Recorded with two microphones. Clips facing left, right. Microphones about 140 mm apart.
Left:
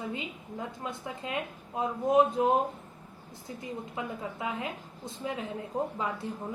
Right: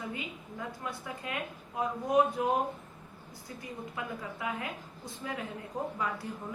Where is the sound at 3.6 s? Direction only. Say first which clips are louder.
Left 3 dB; 25° left (ahead or behind).